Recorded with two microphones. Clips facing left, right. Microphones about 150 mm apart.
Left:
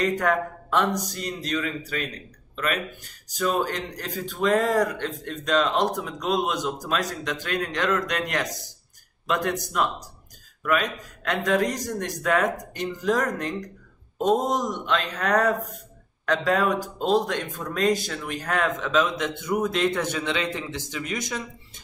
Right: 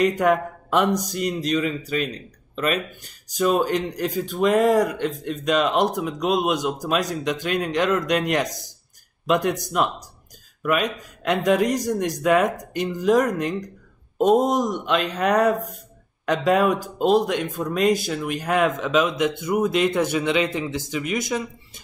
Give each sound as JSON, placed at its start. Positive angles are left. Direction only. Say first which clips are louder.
{"t": 0.0, "sound": "speech", "louder": "right 4 dB", "side_deg": -15}